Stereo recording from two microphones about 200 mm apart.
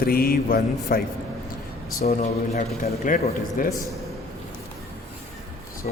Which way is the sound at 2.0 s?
35° left (ahead or behind).